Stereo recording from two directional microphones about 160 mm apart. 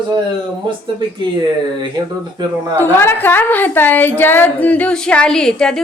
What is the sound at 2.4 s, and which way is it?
Speech, 25° right (ahead or behind).